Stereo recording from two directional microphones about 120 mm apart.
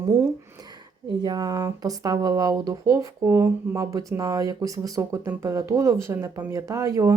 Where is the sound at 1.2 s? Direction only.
35° right (ahead or behind).